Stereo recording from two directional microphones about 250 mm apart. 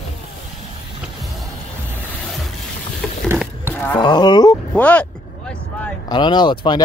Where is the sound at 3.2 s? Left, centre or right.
Centre.